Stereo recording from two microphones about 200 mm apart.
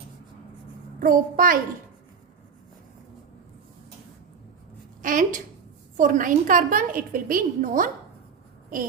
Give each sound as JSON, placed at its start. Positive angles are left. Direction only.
{"t": 0.9, "sound": "a woman's voice", "side_deg": -45}
{"t": 5.0, "sound": "a woman's voice", "side_deg": -40}